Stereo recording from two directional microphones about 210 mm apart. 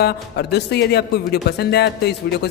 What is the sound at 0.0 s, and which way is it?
Speech, 50° left (ahead or behind).